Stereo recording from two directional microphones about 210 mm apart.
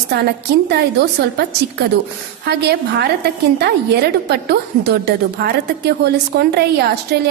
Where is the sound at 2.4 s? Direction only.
50° right (ahead or behind).